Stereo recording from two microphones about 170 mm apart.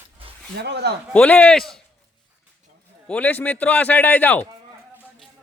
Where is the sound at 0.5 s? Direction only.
80° right.